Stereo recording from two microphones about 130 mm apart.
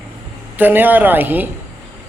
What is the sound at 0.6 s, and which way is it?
Speech, 15° right (ahead or behind).